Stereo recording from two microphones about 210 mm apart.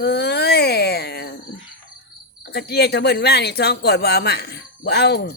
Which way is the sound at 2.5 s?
50° left (ahead or behind).